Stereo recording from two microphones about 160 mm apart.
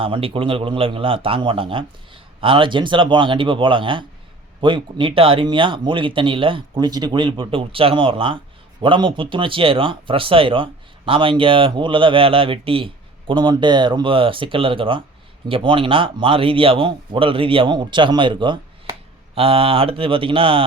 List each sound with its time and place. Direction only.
0.0 s speech: 35° right (ahead or behind)